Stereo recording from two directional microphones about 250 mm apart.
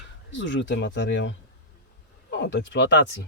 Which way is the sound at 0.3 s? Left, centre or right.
Left.